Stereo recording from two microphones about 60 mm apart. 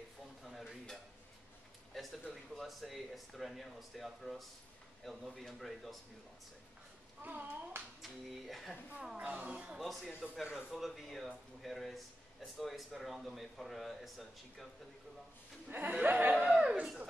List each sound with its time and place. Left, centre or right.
0.4 s dishes: centre
2.5 s a man's voice: centre
7.2 s speech: right
8.0 s a man's voice: centre
9.1 s speech: right
9.8 s a man's voice: centre
15.7 s speech: right
16.4 s speech: centre